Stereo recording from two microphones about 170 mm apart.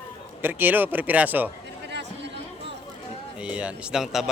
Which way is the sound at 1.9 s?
90° right.